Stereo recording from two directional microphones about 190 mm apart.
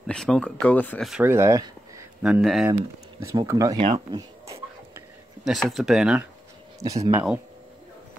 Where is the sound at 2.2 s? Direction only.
5° right (ahead or behind).